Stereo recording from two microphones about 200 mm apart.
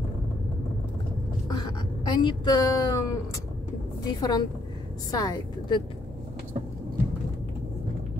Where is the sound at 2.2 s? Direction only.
20° left (ahead or behind).